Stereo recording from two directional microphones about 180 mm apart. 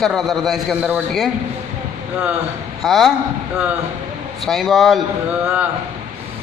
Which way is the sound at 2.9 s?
Centre (ahead or behind).